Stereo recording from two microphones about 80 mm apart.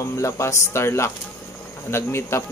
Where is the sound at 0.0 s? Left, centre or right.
Left.